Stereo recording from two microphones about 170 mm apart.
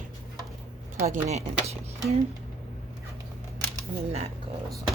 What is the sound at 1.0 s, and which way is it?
Speech, 40° right (ahead or behind).